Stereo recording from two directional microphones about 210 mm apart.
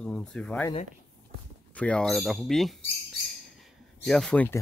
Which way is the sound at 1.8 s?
5° left (ahead or behind).